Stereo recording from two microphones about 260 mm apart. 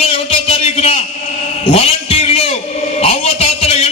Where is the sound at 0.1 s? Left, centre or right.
Left.